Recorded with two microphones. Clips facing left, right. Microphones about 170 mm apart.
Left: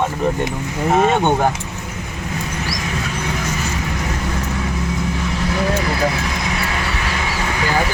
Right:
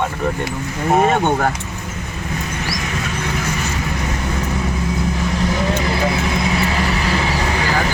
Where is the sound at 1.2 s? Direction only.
15° left (ahead or behind).